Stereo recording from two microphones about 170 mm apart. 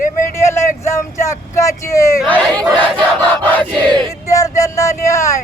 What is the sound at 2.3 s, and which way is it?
Crowd, 5° left (ahead or behind).